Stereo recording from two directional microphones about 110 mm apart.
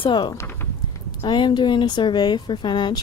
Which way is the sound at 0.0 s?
50° left (ahead or behind).